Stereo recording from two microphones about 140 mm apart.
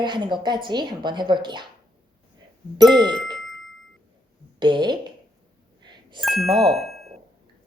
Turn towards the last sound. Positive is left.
turn(degrees=0)  # may be behind; listen again after turning